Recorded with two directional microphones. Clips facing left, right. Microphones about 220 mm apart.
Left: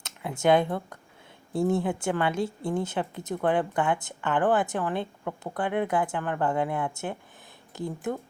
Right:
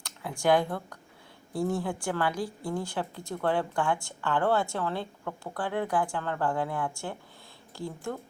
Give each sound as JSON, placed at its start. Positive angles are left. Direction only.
{"t": 0.0, "sound": "a woman's voice", "side_deg": 20}